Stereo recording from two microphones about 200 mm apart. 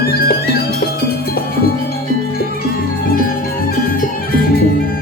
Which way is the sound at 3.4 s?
45° left (ahead or behind).